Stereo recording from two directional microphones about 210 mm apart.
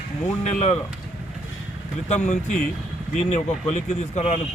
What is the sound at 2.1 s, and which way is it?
Speech, 35° left (ahead or behind).